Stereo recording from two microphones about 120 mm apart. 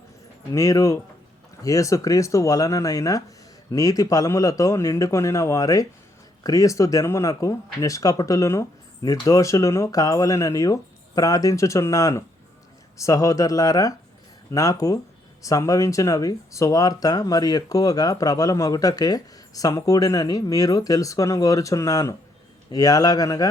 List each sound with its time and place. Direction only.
0.5 s a man's voice: 25° left (ahead or behind)